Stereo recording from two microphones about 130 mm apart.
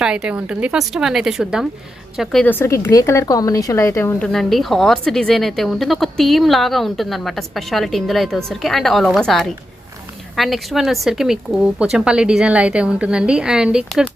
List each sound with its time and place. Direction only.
0.0 s a woman's voice: 5° right (ahead or behind)
2.4 s a woman's voice: 15° left (ahead or behind)
4.2 s a woman's voice: 5° left (ahead or behind)